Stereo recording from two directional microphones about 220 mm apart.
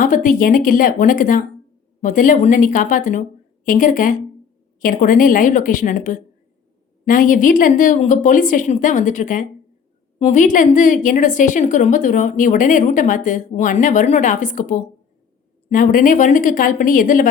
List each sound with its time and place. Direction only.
0.0 s a woman's voice: 35° left (ahead or behind)